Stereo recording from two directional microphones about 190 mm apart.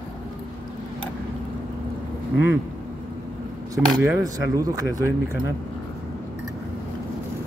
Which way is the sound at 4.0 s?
20° right (ahead or behind).